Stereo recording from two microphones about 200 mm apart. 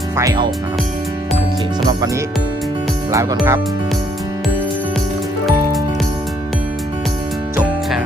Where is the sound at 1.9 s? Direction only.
15° right (ahead or behind).